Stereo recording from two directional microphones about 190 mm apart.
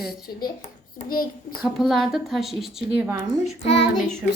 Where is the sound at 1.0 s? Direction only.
50° left (ahead or behind).